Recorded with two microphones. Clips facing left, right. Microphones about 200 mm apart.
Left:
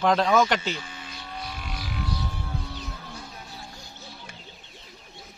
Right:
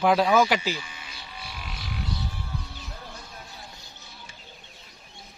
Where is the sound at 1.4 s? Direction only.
50° left (ahead or behind).